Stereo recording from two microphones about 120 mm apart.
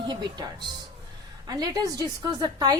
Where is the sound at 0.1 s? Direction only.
35° right (ahead or behind).